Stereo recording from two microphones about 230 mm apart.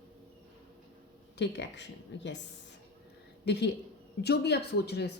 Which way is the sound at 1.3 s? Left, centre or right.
Left.